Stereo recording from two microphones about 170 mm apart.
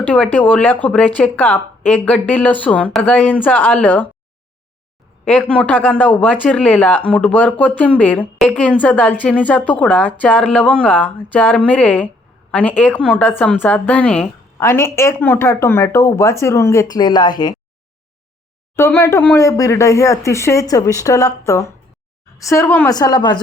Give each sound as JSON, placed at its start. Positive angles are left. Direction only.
{"t": 0.0, "sound": "a woman's voice", "side_deg": 10}
{"t": 5.2, "sound": "a woman's voice", "side_deg": 10}
{"t": 18.8, "sound": "a woman's voice", "side_deg": 15}
{"t": 22.9, "sound": "speech", "side_deg": 25}